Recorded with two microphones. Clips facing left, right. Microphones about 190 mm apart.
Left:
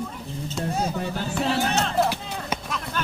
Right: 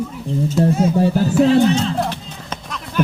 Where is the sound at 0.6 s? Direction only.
35° right (ahead or behind).